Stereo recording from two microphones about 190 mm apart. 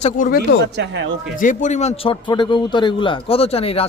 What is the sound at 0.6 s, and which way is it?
Speech, 70° right (ahead or behind).